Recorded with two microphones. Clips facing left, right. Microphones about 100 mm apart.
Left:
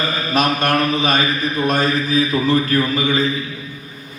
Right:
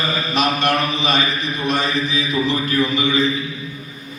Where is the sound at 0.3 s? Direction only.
45° left (ahead or behind).